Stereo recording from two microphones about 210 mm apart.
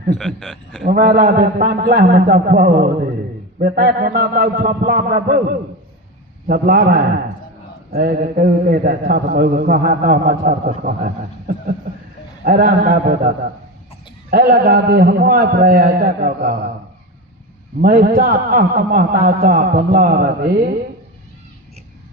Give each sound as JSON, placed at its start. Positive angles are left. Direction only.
{"t": 0.2, "sound": "a man's voice", "side_deg": 0}
{"t": 0.9, "sound": "a man's voice", "side_deg": -40}
{"t": 17.7, "sound": "a man's voice", "side_deg": -45}